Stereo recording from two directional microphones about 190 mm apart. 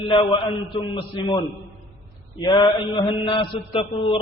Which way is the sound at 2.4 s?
25° left (ahead or behind).